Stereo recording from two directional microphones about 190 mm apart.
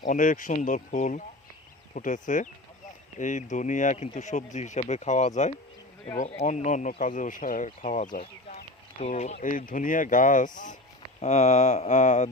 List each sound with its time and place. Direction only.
0.1 s speech: 45° left (ahead or behind)